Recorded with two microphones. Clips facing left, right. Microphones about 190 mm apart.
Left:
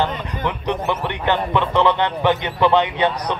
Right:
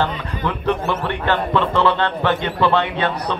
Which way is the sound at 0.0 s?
20° left (ahead or behind).